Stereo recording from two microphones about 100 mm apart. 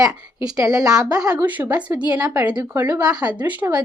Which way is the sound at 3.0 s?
40° right (ahead or behind).